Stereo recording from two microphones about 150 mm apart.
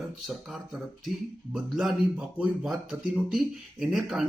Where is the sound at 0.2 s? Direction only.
Centre (ahead or behind).